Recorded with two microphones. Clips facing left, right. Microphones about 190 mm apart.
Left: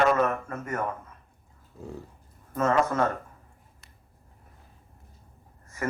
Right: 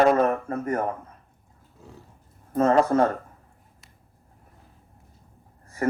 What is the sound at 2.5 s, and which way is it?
Speech, 35° right (ahead or behind).